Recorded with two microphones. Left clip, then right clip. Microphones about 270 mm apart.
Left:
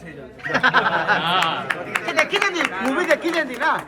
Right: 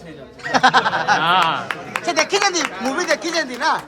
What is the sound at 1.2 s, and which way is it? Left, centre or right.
Speech, right.